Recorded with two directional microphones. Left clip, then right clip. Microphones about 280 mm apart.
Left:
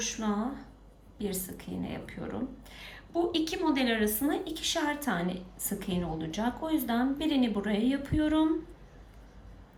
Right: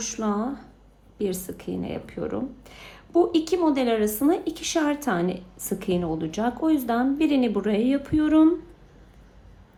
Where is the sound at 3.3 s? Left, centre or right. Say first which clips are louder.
Right 7 dB; centre.